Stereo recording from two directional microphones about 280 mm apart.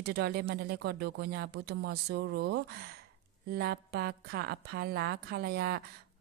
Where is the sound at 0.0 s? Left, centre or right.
Right.